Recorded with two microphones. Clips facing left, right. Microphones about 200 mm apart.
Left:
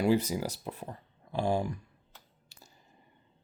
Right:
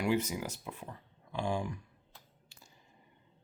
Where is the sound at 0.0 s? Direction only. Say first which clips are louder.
Left 5 dB; 35° left (ahead or behind).